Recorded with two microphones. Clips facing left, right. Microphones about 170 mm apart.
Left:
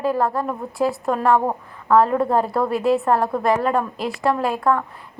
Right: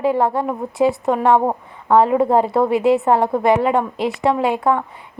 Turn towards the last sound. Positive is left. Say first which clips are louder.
# right 2 dB
turn(degrees=-25)  # may be behind; listen again after turning